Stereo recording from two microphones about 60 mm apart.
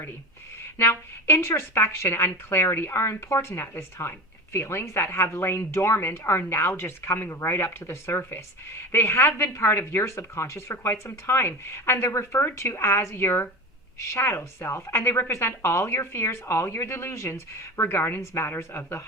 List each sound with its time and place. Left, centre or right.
0.8 s a woman's voice: left